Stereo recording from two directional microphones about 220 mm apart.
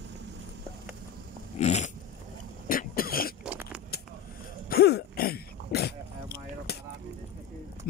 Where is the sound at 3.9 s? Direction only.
45° left (ahead or behind).